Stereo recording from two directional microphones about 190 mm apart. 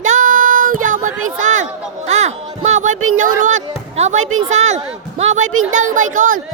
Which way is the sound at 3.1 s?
40° right (ahead or behind).